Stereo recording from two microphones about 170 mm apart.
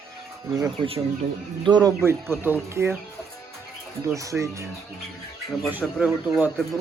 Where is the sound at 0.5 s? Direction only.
20° right (ahead or behind).